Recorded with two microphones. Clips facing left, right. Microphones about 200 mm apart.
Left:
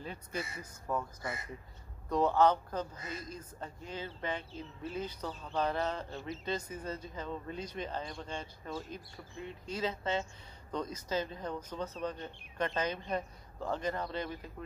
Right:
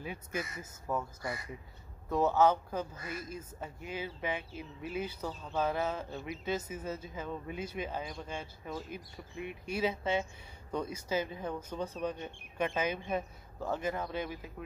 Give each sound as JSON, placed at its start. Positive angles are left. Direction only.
{"t": 0.0, "sound": "speech", "side_deg": -10}
{"t": 2.0, "sound": "speech", "side_deg": -5}